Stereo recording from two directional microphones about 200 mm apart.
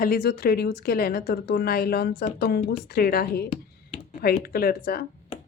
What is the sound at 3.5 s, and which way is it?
Computer keyboard, 30° left (ahead or behind).